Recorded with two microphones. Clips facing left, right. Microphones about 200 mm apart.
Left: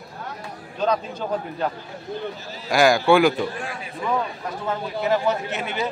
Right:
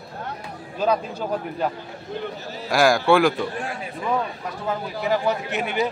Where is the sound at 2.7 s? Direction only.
Centre (ahead or behind).